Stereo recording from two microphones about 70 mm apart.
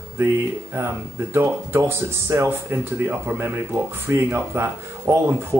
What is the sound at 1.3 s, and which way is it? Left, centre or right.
Speech, right.